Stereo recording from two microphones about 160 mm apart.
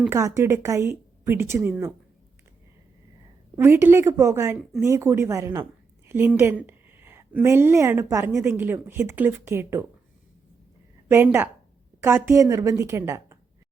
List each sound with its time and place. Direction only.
0.1 s speech: 20° right (ahead or behind)
3.5 s speech: 15° right (ahead or behind)
11.1 s a woman's voice: 15° right (ahead or behind)